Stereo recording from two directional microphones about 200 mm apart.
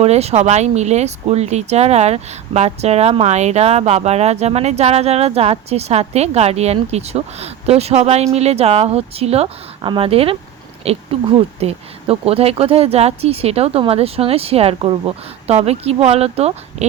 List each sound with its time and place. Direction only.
0.0 s speech: 30° right (ahead or behind)